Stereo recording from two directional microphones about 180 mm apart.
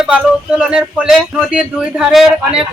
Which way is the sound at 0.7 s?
5° right (ahead or behind).